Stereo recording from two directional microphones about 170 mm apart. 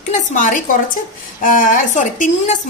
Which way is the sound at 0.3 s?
50° left (ahead or behind).